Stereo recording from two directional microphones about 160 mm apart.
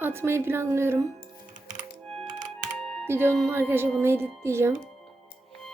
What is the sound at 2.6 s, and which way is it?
Computer keyboard, 5° left (ahead or behind).